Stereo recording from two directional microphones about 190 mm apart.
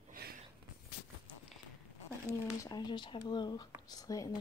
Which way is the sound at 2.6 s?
20° left (ahead or behind).